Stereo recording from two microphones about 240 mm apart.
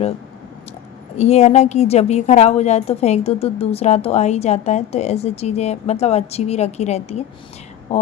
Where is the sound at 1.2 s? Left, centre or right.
Left.